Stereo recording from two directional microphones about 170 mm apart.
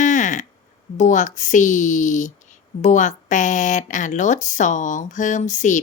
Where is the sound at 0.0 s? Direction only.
50° left (ahead or behind).